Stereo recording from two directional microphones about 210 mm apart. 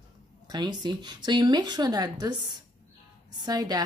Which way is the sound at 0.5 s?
20° right (ahead or behind).